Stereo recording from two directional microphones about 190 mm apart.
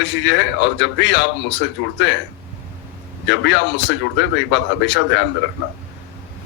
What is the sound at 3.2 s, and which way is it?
A man's voice, 70° left (ahead or behind).